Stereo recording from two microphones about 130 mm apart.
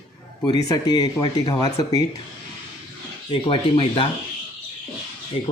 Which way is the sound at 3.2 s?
45° left (ahead or behind).